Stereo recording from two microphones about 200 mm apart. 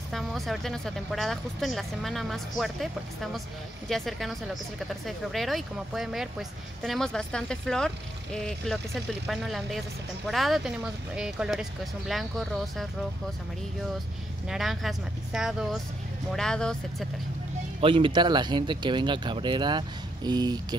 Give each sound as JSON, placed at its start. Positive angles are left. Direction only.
{"t": 0.1, "sound": "speech", "side_deg": 0}
{"t": 14.5, "sound": "speech", "side_deg": 0}
{"t": 17.7, "sound": "speech", "side_deg": -25}